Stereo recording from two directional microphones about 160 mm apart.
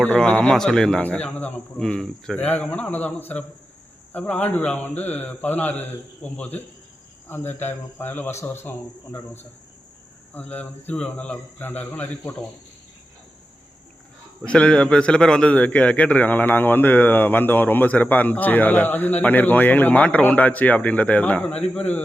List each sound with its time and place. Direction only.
0.0 s a man's voice: 10° left (ahead or behind)
14.4 s a man's voice: 5° left (ahead or behind)